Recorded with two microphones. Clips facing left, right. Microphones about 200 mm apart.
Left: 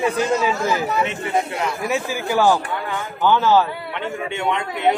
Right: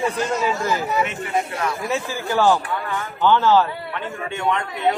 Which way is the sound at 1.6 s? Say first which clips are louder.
Left 1 dB; 15° left (ahead or behind).